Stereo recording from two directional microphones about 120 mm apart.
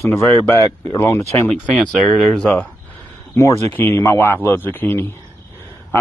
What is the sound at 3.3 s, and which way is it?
Speech, 25° left (ahead or behind).